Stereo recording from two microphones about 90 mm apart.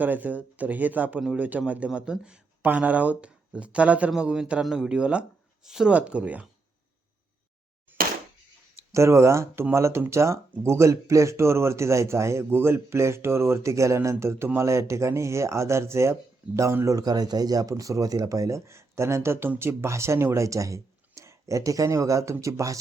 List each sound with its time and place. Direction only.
0.0 s speech: 20° right (ahead or behind)
8.9 s speech: 35° right (ahead or behind)